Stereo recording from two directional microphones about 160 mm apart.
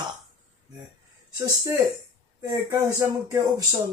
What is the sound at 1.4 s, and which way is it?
Speech, 20° right (ahead or behind).